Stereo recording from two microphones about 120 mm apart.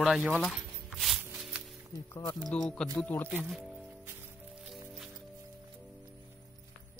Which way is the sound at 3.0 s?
15° left (ahead or behind).